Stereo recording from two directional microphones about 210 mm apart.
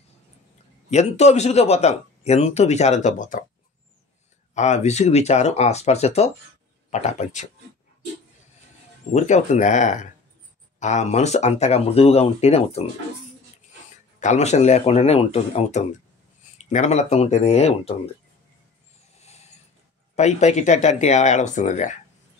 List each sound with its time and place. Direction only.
0.8 s a man's voice: 30° left (ahead or behind)
4.6 s a man's voice: 35° left (ahead or behind)
9.1 s a man's voice: 35° left (ahead or behind)
14.2 s a man's voice: 35° left (ahead or behind)
19.1 s mechanisms: 30° left (ahead or behind)
20.2 s a man's voice: 35° left (ahead or behind)